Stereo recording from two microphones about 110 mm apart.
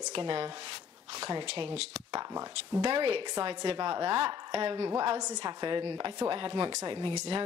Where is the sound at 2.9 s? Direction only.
55° right (ahead or behind).